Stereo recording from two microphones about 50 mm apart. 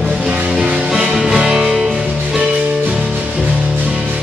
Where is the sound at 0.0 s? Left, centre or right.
Centre.